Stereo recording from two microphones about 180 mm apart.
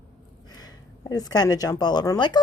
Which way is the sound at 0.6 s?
20° left (ahead or behind).